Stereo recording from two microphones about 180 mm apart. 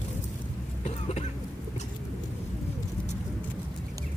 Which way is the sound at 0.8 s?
40° left (ahead or behind).